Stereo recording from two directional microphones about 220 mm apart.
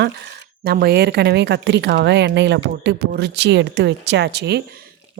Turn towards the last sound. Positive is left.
turn(degrees=-50)  # may be behind; listen again after turning